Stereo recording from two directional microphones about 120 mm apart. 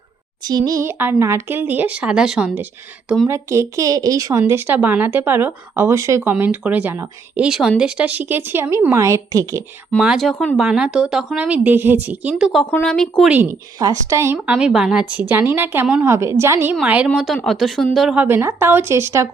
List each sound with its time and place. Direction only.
0.4 s speech: 30° right (ahead or behind); by 2.6 s 5° right (ahead or behind)
3.2 s a woman's voice: 25° right (ahead or behind)
6.3 s speech: 10° right (ahead or behind); by 9.6 s 30° right (ahead or behind)
10.0 s speech: 5° right (ahead or behind)
10.6 s speech: 5° right (ahead or behind)
12.4 s speech: centre (ahead or behind)
13.2 s speech: 15° right (ahead or behind)
13.7 s a woman's voice: 30° right (ahead or behind)
14.4 s a woman's voice: 10° right (ahead or behind)
16.8 s speech: 10° right (ahead or behind)
17.2 s speech: centre (ahead or behind)
18.2 s a woman's voice: 15° right (ahead or behind)